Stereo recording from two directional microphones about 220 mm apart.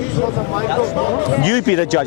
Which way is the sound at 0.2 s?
25° left (ahead or behind).